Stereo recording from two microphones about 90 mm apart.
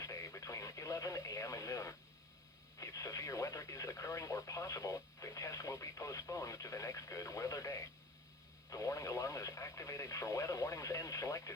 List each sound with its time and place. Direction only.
0.0 s radio: 35° left (ahead or behind)